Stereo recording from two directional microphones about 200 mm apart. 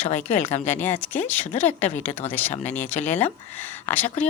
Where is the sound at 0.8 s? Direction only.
10° left (ahead or behind).